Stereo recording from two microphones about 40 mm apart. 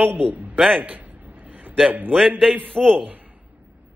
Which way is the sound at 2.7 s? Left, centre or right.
Centre.